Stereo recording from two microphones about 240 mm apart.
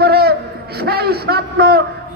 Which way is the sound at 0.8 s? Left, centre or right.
Right.